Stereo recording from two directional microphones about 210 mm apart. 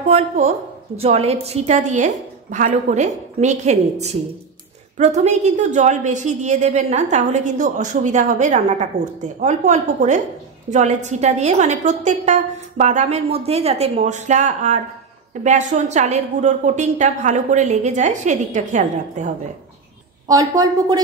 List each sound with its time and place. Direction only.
0.1 s a woman's voice: 30° right (ahead or behind)
20.2 s speech: 15° right (ahead or behind)